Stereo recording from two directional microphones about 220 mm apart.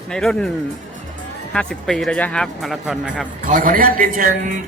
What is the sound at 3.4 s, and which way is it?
A man's voice, 40° right (ahead or behind).